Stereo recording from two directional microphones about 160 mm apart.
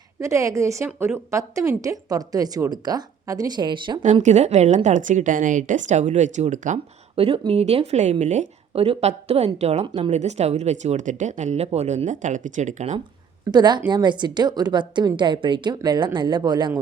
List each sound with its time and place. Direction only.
0.2 s a woman's voice: 20° right (ahead or behind)
4.0 s speech: 50° right (ahead or behind)
7.2 s speech: 35° right (ahead or behind)
13.5 s a woman's voice: 25° right (ahead or behind)